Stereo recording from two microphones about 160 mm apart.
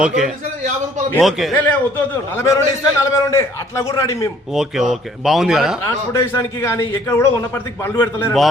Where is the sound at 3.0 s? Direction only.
20° left (ahead or behind).